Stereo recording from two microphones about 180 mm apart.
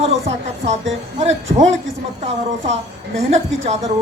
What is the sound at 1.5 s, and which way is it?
Speech, 40° right (ahead or behind).